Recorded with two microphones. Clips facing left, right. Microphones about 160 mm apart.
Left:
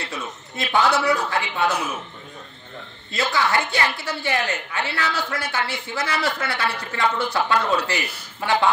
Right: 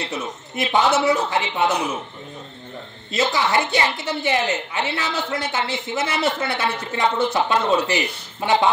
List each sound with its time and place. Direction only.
0.0 s a woman's voice: 20° right (ahead or behind)
3.1 s a woman's voice: 20° right (ahead or behind)